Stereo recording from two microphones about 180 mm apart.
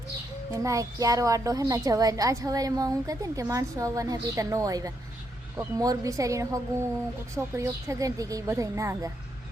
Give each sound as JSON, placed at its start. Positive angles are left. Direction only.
{"t": 0.6, "sound": "a woman's voice", "side_deg": -20}